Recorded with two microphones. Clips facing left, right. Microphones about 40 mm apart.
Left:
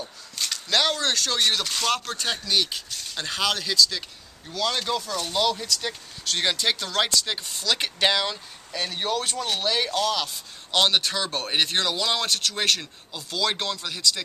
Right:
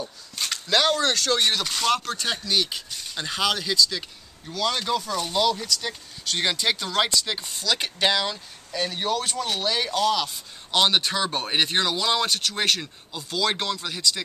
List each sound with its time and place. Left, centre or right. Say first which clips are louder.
0.7 s speech: right 2 dB; centre